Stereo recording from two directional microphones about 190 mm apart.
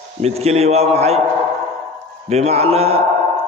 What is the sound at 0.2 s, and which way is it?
A man's voice, 35° right (ahead or behind).